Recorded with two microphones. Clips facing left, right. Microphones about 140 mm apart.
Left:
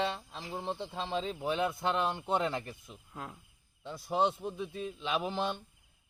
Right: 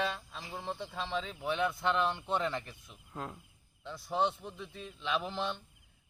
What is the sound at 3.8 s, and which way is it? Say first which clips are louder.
A man's voice: left 2 dB; 15° left (ahead or behind).